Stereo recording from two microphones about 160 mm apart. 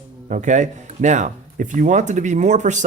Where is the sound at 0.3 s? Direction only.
50° right (ahead or behind).